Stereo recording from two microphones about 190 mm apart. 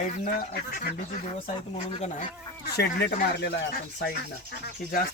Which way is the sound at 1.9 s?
35° left (ahead or behind).